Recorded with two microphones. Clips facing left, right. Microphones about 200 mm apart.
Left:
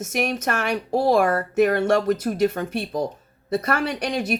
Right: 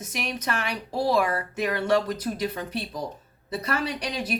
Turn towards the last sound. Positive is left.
turn(degrees=60)  # may be behind; listen again after turning